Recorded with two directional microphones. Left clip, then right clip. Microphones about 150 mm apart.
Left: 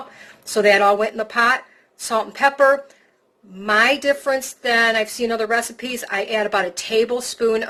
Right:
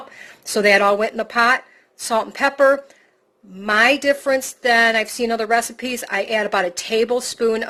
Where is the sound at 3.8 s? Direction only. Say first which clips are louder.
Right 4 dB; 50° right (ahead or behind).